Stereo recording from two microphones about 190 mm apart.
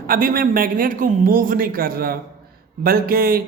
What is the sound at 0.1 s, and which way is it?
Speech, 50° right (ahead or behind).